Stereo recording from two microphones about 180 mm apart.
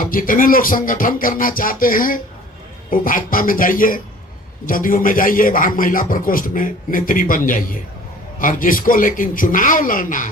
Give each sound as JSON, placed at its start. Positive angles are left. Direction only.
{"t": 0.0, "sound": "a man's voice", "side_deg": 50}